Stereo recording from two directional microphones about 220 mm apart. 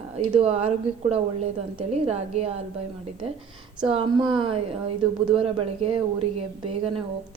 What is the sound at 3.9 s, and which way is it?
Speech, 25° right (ahead or behind).